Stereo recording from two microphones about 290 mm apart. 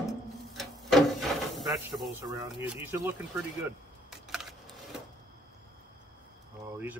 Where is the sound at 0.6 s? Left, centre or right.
Centre.